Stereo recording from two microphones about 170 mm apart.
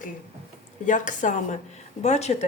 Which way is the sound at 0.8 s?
50° left (ahead or behind).